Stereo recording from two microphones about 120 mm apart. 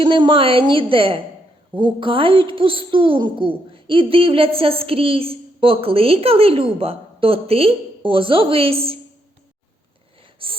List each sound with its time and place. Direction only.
0.0 s a woman's voice: 45° right (ahead or behind)
10.4 s gasp: 50° right (ahead or behind)